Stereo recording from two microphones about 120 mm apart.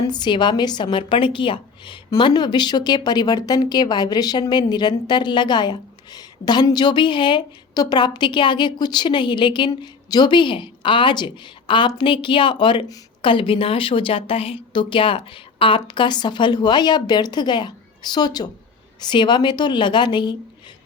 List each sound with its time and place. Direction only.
0.0 s a woman's voice: 35° left (ahead or behind)